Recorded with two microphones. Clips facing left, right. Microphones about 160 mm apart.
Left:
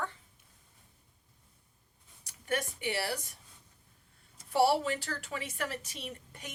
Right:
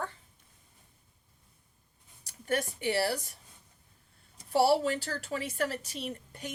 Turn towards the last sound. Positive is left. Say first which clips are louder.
# right 5 dB
turn(degrees=-35)  # may be behind; listen again after turning